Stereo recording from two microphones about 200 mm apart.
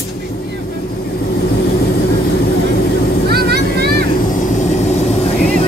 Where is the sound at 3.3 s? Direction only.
55° right (ahead or behind).